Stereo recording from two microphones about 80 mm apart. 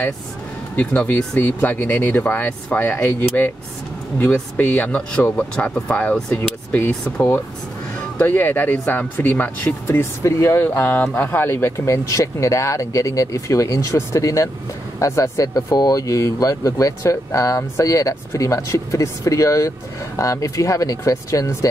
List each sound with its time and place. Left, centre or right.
0.7 s speech: left
10.2 s speech: left
10.8 s speech: centre; by 21.6 s left